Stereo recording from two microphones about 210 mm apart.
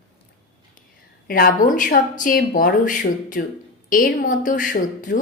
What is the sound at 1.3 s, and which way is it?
A woman's voice, 45° left (ahead or behind).